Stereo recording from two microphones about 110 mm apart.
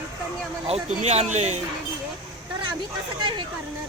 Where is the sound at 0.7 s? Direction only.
80° right.